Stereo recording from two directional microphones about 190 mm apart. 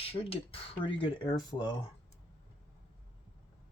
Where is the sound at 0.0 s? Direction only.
30° left (ahead or behind).